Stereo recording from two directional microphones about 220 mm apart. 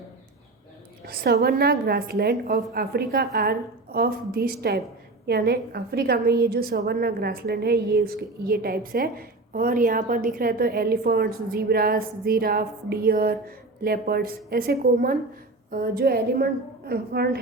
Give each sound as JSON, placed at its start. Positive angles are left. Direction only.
{"t": 1.0, "sound": "a woman's voice", "side_deg": -45}